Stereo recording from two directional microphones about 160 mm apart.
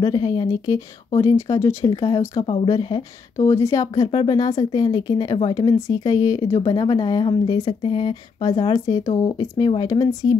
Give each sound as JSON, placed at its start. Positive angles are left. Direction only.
{"t": 0.0, "sound": "speech", "side_deg": 25}
{"t": 2.4, "sound": "speech", "side_deg": 35}
{"t": 2.7, "sound": "speech", "side_deg": 25}